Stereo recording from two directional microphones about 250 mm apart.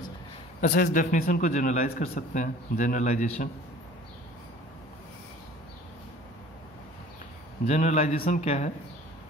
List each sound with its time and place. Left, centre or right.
0.6 s a man's voice: left
7.6 s a man's voice: left